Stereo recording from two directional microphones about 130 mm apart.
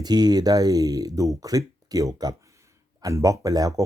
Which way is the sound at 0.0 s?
30° right (ahead or behind).